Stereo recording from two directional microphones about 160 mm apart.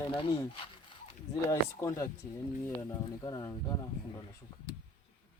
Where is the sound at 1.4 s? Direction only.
20° left (ahead or behind).